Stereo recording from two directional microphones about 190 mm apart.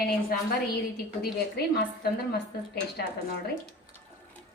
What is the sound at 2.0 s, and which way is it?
A woman's voice, 55° left (ahead or behind).